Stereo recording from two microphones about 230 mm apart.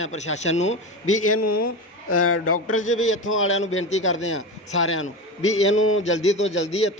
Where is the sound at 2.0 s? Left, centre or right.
Left.